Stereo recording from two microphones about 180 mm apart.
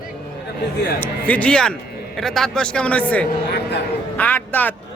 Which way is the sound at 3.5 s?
65° left (ahead or behind).